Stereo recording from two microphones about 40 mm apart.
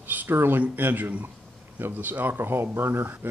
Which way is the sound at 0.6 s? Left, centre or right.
Right.